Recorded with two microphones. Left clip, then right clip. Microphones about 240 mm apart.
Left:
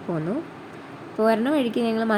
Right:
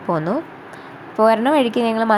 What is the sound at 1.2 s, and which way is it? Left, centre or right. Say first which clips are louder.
Speech: right 7 dB; right.